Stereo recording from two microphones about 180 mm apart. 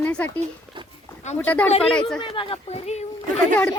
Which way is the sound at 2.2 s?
30° left (ahead or behind).